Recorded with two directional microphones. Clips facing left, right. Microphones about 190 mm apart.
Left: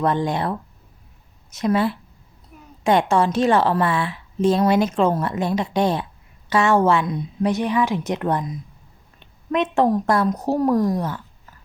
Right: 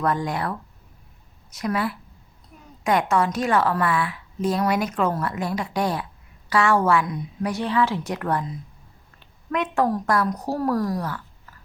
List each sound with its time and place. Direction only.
0.0 s a woman's voice: 25° left (ahead or behind)